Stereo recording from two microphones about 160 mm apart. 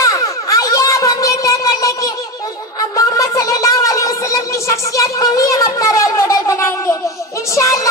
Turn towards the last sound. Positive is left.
turn(degrees=20)  # may be behind; listen again after turning